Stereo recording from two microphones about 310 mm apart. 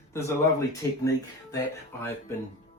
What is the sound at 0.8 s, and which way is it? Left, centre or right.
Speech, centre.